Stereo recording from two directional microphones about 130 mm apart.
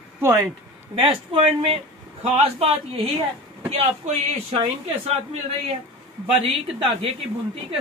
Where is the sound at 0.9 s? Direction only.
40° right (ahead or behind).